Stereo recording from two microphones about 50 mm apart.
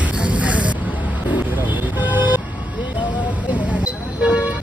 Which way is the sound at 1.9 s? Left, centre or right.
Right.